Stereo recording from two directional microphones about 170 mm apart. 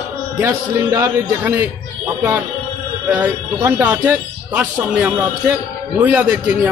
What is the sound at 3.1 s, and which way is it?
Speech, 10° right (ahead or behind).